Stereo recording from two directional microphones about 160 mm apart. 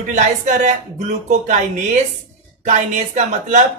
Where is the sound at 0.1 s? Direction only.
50° right (ahead or behind).